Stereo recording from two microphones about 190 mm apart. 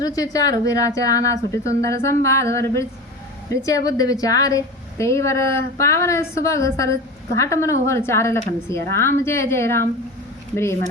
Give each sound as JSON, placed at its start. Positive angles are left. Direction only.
{"t": 0.0, "sound": "a woman's voice", "side_deg": 20}